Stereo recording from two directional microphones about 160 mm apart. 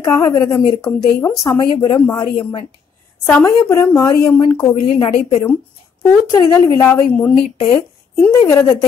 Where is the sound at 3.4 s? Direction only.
20° left (ahead or behind).